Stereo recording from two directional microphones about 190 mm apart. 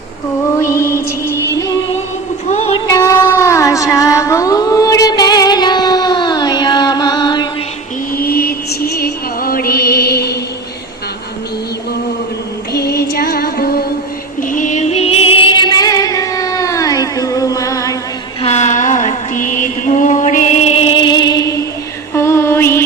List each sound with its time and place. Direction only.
0.6 s music: 15° left (ahead or behind)
2.5 s a sound: 35° left (ahead or behind)
2.7 s a sound: 20° left (ahead or behind)
8.1 s music: 50° left (ahead or behind)
12.7 s female singing: 55° left (ahead or behind)
14.4 s music: 45° left (ahead or behind); by 17.9 s 15° left (ahead or behind)
18.4 s music: 40° left (ahead or behind); by 21.6 s 20° left (ahead or behind)
22.1 s mantra: 15° left (ahead or behind)